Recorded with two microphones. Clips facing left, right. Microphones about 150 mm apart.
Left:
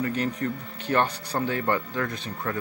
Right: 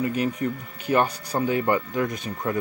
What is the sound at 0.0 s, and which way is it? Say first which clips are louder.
Speech: right 2 dB; 10° right (ahead or behind).